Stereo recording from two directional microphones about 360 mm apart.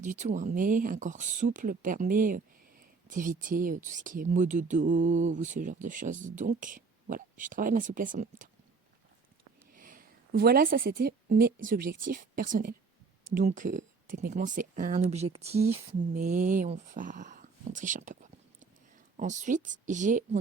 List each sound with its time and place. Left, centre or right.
0.0 s speech: centre
9.7 s a woman's voice: right